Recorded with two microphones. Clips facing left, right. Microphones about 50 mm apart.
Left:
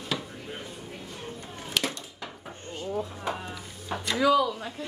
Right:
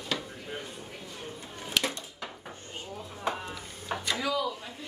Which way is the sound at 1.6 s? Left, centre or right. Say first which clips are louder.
Even; centre.